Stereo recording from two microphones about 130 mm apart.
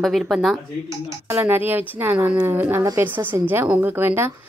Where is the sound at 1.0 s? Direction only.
20° right (ahead or behind).